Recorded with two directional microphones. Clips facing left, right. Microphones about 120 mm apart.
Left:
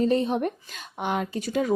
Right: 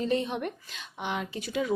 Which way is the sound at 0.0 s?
40° left (ahead or behind).